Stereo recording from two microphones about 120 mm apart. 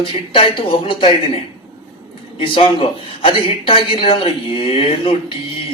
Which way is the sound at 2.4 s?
50° left (ahead or behind).